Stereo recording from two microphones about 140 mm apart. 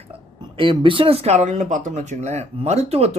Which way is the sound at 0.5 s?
35° right (ahead or behind).